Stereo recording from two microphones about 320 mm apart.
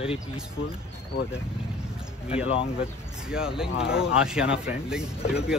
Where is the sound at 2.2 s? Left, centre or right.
Centre.